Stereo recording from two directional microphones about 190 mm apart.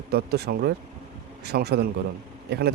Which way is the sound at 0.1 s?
55° right (ahead or behind).